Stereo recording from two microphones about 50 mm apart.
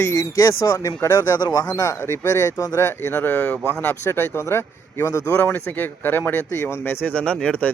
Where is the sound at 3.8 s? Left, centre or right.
Left.